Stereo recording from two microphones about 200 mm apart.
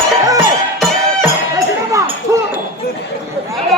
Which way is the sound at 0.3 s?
15° right (ahead or behind).